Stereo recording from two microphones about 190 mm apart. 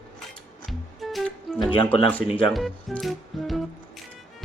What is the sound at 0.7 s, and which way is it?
Music, centre (ahead or behind).